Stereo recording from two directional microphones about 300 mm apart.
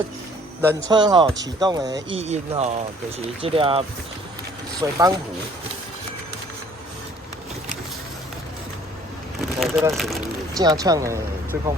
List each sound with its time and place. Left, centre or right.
0.9 s speech: centre
9.6 s a sound: centre
9.9 s speech: centre
10.6 s speech: centre